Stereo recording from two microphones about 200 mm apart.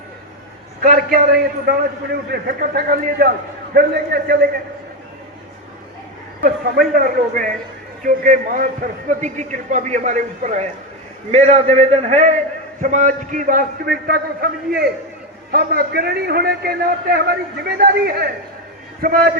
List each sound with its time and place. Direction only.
0.8 s a man's voice: 45° right (ahead or behind)
6.4 s a man's voice: 45° right (ahead or behind)